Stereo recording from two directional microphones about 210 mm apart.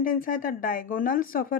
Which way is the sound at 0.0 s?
40° left (ahead or behind).